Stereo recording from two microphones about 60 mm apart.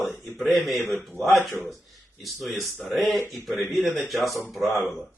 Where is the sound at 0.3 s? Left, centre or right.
Centre.